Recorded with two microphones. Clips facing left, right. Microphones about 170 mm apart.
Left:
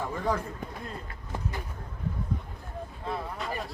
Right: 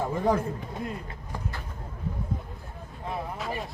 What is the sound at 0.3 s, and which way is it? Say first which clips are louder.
Speech: right 5 dB; 25° right (ahead or behind).